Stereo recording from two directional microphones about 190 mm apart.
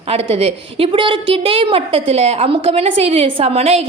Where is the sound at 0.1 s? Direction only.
30° right (ahead or behind).